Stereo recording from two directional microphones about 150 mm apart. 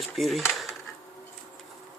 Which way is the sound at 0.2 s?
Centre (ahead or behind).